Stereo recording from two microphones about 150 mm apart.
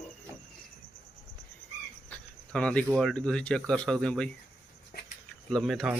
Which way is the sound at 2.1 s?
5° left (ahead or behind).